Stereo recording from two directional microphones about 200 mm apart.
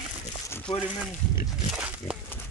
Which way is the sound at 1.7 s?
5° right (ahead or behind).